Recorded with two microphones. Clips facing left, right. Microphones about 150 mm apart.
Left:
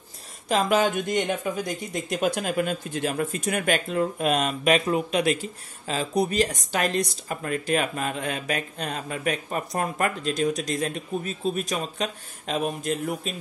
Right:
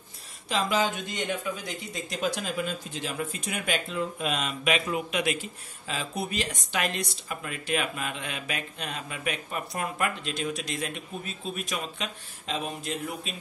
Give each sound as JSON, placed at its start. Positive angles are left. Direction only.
{"t": 0.5, "sound": "speech", "side_deg": 50}